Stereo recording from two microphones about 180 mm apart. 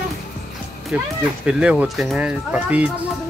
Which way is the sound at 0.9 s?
5° right (ahead or behind).